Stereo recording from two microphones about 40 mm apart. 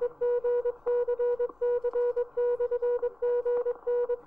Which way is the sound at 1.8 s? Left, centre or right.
Centre.